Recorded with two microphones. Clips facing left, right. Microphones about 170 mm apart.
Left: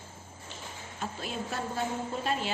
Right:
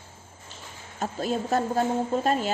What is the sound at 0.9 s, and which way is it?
A woman's voice, 40° right (ahead or behind).